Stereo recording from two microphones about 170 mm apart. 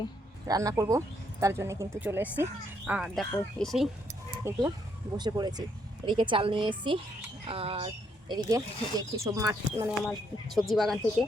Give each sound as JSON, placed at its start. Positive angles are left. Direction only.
{"t": 0.4, "sound": "speech", "side_deg": -20}
{"t": 4.4, "sound": "speech", "side_deg": -15}
{"t": 8.4, "sound": "speech", "side_deg": -20}
{"t": 10.1, "sound": "speech", "side_deg": 0}